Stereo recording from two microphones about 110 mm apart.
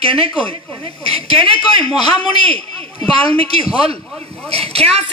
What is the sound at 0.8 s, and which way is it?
Speech, 60° right (ahead or behind).